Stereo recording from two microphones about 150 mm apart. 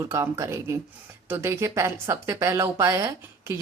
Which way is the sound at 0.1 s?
20° right (ahead or behind).